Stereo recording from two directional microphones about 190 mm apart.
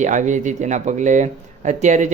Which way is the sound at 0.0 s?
40° right (ahead or behind).